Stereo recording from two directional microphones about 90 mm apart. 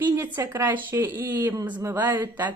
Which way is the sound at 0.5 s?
20° right (ahead or behind).